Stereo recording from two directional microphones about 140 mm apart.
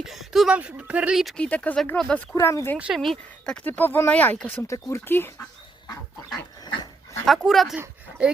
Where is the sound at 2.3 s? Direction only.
20° left (ahead or behind).